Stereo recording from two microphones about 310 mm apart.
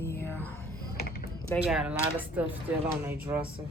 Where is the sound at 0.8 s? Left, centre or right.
Left.